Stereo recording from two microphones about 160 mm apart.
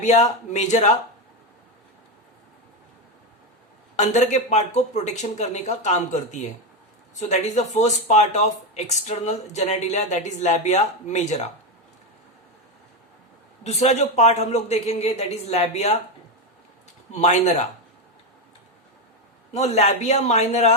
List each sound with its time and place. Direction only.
0.0 s speech: 45° left (ahead or behind)
3.9 s speech: 45° left (ahead or behind)
13.7 s speech: 45° left (ahead or behind)
17.1 s speech: 45° left (ahead or behind)
19.5 s speech: 40° left (ahead or behind)